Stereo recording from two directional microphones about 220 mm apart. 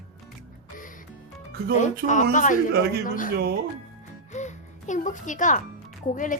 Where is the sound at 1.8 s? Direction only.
35° left (ahead or behind).